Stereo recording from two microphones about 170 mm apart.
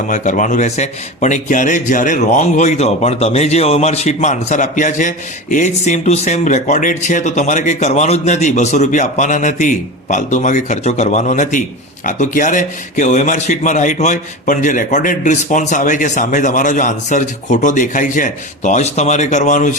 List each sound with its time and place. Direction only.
0.1 s a man's voice: 50° left (ahead or behind)